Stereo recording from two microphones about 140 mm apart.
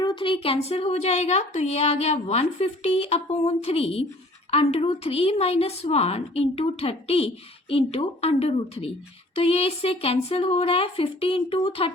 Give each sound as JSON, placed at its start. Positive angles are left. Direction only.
{"t": 0.0, "sound": "speech", "side_deg": 35}